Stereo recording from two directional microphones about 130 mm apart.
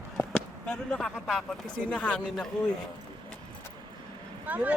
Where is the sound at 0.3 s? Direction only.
5° left (ahead or behind).